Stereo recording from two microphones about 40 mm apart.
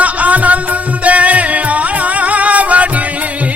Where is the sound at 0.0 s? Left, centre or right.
Right.